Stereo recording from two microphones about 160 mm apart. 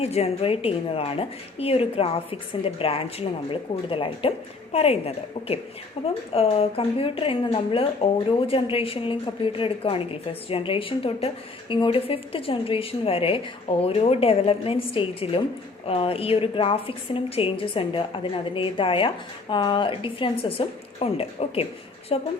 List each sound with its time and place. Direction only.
0.0 s a woman's voice: 40° left (ahead or behind)